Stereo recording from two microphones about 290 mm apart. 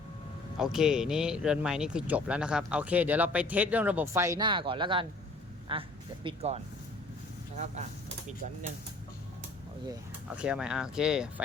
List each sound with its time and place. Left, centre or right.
0.5 s a woman's voice: centre; by 6.6 s right
9.9 s speech: centre